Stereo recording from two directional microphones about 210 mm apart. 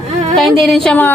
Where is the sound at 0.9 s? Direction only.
10° left (ahead or behind).